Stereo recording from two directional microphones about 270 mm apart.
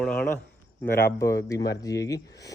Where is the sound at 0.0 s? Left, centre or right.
Centre.